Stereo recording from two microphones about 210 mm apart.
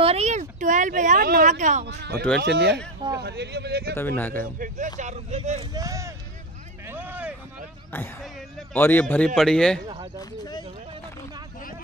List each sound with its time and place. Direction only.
0.0 s speech: 30° right (ahead or behind)
1.9 s a man's voice: 50° right (ahead or behind)
3.9 s speech: 10° left (ahead or behind)
4.6 s speech: 35° right (ahead or behind)
5.7 s speech: 15° right (ahead or behind)
6.9 s a sound: 10° right (ahead or behind)
7.9 s speech: 5° left (ahead or behind)